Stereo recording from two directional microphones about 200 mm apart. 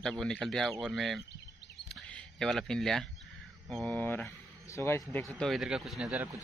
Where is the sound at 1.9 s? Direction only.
Centre (ahead or behind).